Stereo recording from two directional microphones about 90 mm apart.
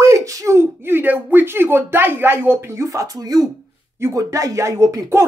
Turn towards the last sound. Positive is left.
turn(degrees=-35)  # may be behind; listen again after turning